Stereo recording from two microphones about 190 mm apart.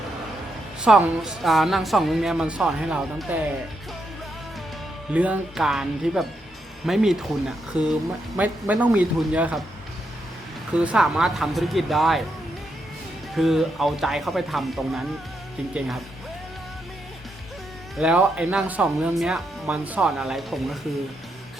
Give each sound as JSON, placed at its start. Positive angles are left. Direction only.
{"t": 0.8, "sound": "speech", "side_deg": -5}
{"t": 5.1, "sound": "speech", "side_deg": -5}
{"t": 10.8, "sound": "speech", "side_deg": -5}
{"t": 13.3, "sound": "speech", "side_deg": 0}
{"t": 17.9, "sound": "speech", "side_deg": -5}